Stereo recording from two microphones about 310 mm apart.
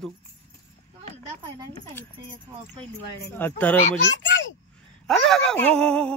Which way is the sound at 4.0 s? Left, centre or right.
Left.